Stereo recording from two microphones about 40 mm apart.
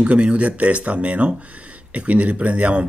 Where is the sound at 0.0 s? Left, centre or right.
Right.